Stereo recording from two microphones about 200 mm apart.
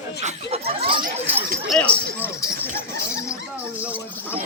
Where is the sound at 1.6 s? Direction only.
5° left (ahead or behind).